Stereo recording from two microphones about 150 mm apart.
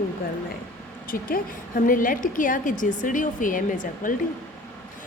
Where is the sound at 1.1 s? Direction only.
70° left (ahead or behind).